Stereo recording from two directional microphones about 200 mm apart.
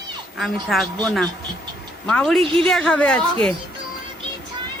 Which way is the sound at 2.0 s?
5° left (ahead or behind).